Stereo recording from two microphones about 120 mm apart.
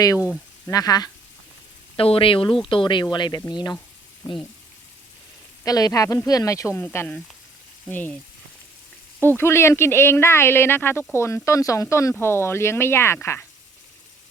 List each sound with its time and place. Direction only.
0.7 s speech: 30° left (ahead or behind)
2.0 s speech: 50° left (ahead or behind)
5.6 s speech: 30° left (ahead or behind)
6.7 s speech: 15° left (ahead or behind)
9.2 s speech: 20° left (ahead or behind)